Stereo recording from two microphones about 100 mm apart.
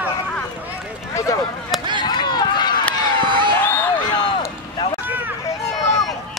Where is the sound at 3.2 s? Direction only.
55° right (ahead or behind).